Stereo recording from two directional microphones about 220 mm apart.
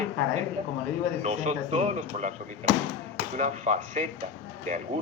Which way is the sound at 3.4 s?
35° right (ahead or behind).